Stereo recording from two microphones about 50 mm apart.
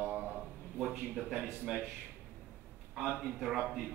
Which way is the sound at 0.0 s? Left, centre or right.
Right.